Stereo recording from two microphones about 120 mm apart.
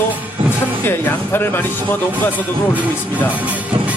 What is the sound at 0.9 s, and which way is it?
Speech, 15° left (ahead or behind).